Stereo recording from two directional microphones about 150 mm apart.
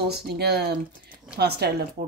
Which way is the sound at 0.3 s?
90° right.